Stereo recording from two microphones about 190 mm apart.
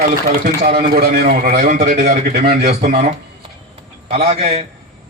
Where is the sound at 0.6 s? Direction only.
50° right (ahead or behind).